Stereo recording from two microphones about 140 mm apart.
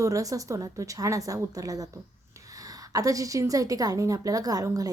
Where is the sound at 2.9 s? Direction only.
25° right (ahead or behind).